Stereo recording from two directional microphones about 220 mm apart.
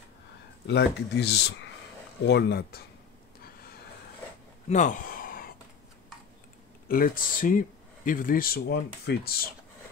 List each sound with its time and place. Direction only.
0.7 s speech: 50° left (ahead or behind)
4.6 s a sound: 35° left (ahead or behind)
6.9 s speech: 40° left (ahead or behind)